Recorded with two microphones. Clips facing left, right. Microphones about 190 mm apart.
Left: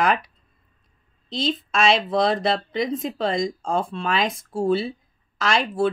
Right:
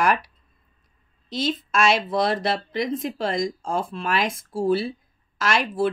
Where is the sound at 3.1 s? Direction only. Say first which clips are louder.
Left 1 dB; 25° left (ahead or behind).